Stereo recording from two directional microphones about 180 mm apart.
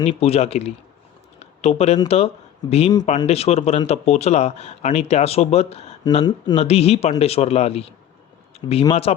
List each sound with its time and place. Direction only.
0.0 s speech: 40° left (ahead or behind)
1.4 s a sound: 35° left (ahead or behind)
2.0 s speech: 35° left (ahead or behind)
6.2 s speech: 20° left (ahead or behind)
6.6 s speech: 35° left (ahead or behind)